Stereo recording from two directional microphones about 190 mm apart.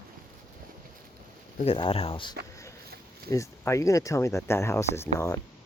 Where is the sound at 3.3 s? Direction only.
15° left (ahead or behind).